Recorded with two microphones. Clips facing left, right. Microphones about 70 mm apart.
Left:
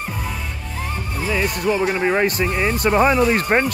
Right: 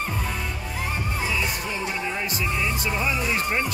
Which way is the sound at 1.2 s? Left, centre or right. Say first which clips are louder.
Left 10 dB; left.